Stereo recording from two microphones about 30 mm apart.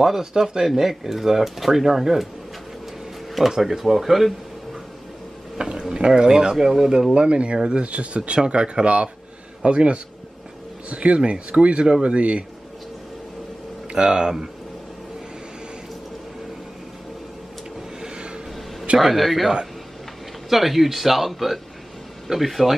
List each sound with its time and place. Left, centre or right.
0.2 s speech: centre
3.6 s speech: centre
5.6 s speech: right
6.5 s speech: centre
7.2 s speech: right
7.9 s a man's voice: right
8.2 s a man's voice: right
13.9 s speech: right
18.0 s vehicle: right
18.9 s speech: centre